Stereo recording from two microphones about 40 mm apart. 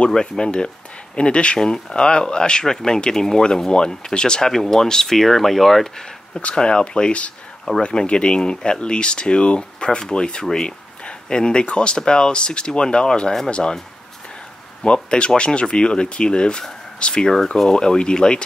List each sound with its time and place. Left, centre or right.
0.1 s speech: centre
6.3 s speech: centre
14.9 s speech: left